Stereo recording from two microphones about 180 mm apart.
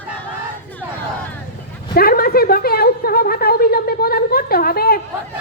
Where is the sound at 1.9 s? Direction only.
55° left (ahead or behind).